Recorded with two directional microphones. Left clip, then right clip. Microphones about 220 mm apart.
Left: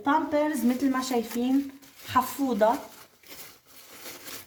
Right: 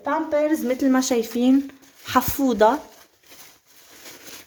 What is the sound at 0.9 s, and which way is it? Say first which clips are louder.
Speech: right 7 dB; 50° right (ahead or behind).